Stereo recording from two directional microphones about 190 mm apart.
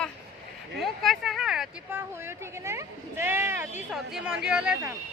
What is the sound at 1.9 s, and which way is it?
Speech, 10° right (ahead or behind).